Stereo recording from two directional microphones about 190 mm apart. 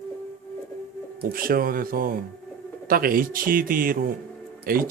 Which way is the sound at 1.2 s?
50° right (ahead or behind).